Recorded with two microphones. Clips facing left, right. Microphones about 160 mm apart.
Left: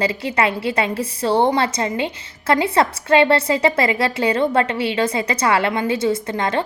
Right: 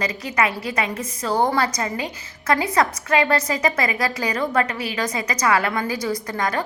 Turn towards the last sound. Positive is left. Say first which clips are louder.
# left 3 dB
turn(degrees=25)  # may be behind; listen again after turning